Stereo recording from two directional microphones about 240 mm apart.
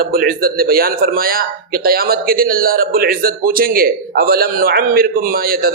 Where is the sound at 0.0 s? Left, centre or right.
Right.